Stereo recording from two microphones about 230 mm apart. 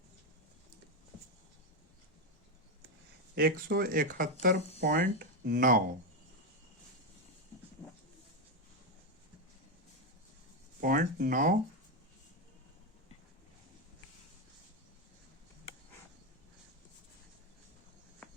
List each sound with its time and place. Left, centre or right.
3.3 s speech: right
10.8 s speech: right
18.2 s a sound: centre